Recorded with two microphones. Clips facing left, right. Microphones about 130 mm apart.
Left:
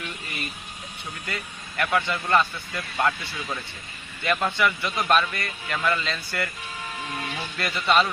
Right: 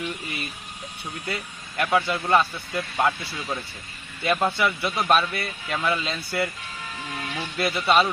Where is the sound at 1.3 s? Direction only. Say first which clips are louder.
Right 2 dB; 20° right (ahead or behind).